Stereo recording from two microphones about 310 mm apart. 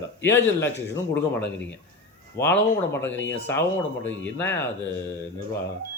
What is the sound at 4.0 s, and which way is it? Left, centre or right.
Speech, left.